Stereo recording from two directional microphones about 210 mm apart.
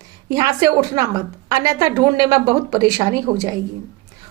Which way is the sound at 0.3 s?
15° right (ahead or behind).